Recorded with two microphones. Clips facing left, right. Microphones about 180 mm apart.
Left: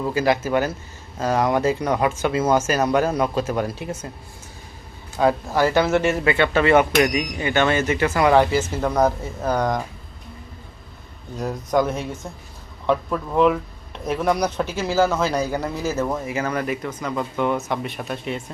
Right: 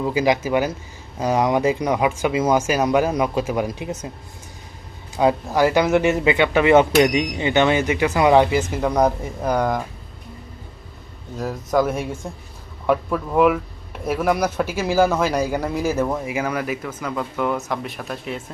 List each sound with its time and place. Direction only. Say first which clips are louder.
0.0 s speech: right 1 dB; 15° right (ahead or behind)
5.1 s speech: right 1 dB; 15° right (ahead or behind)
6.9 s speech: right 3 dB; 25° right (ahead or behind); by 9.8 s 5° right (ahead or behind)
11.3 s speech: right 1 dB; centre (ahead or behind)